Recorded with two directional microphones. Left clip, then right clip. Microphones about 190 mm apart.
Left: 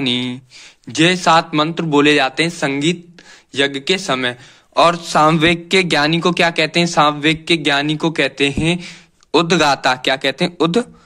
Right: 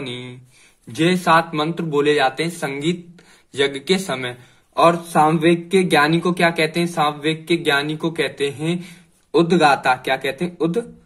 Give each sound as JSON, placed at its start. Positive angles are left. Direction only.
{"t": 0.0, "sound": "a man's voice", "side_deg": 45}